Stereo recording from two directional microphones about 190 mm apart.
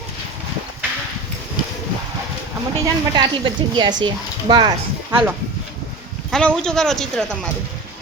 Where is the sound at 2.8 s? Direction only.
20° right (ahead or behind).